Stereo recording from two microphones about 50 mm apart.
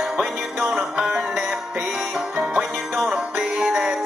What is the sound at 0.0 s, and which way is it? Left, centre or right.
Music, centre.